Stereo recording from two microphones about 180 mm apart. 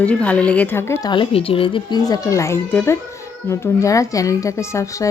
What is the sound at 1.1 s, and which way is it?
A child's voice, 30° left (ahead or behind).